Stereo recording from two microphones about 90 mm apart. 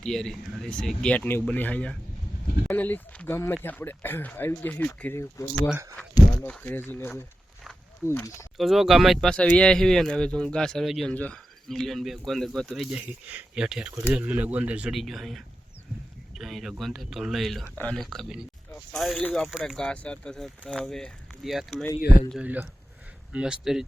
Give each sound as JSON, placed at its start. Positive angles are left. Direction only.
{"t": 0.0, "sound": "speech", "side_deg": 5}
{"t": 5.4, "sound": "speech", "side_deg": 35}
{"t": 6.6, "sound": "speech", "side_deg": 20}
{"t": 8.5, "sound": "speech", "side_deg": -5}
{"t": 9.3, "sound": "speech", "side_deg": 10}
{"t": 11.1, "sound": "speech", "side_deg": 15}
{"t": 11.7, "sound": "speech", "side_deg": 5}
{"t": 13.0, "sound": "speech", "side_deg": -20}
{"t": 13.7, "sound": "speech", "side_deg": -5}
{"t": 14.9, "sound": "speech", "side_deg": 0}
{"t": 19.9, "sound": "speech", "side_deg": 15}
{"t": 22.4, "sound": "speech", "side_deg": -20}